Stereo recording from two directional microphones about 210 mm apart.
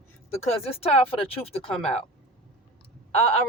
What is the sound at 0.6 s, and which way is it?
Speech, 30° left (ahead or behind).